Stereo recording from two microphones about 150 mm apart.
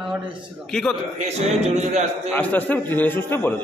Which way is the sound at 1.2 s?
45° right (ahead or behind).